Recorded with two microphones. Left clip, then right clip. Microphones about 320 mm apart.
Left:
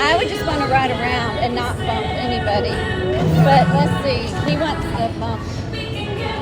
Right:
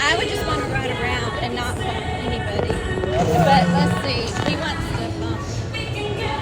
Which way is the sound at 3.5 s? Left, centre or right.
Centre.